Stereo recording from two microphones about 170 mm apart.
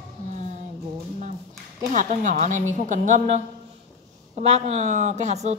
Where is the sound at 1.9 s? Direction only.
50° right (ahead or behind).